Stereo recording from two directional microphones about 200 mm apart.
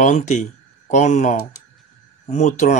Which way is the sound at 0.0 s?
35° left (ahead or behind).